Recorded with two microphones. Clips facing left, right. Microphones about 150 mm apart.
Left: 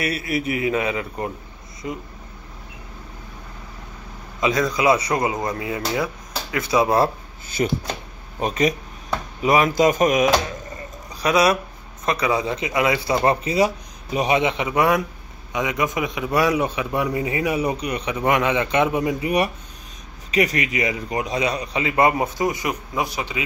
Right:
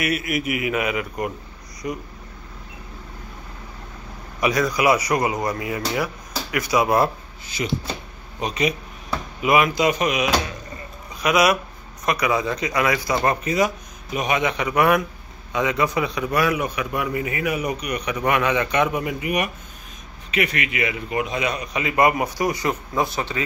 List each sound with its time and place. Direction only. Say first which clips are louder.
0.0 s a man's voice: even; 30° left (ahead or behind)
4.4 s a man's voice: even; 25° left (ahead or behind)
7.6 s a man's voice: left 3 dB; 40° left (ahead or behind)
11.1 s a man's voice: left 1 dB; 30° left (ahead or behind); by 23.4 s 10° left (ahead or behind)